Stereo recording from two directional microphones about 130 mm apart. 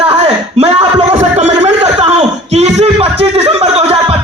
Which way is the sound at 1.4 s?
60° right (ahead or behind).